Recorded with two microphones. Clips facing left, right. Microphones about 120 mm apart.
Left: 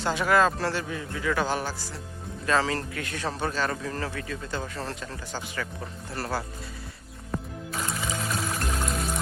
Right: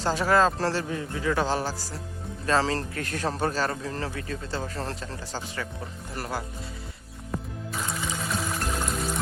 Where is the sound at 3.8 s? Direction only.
25° right (ahead or behind).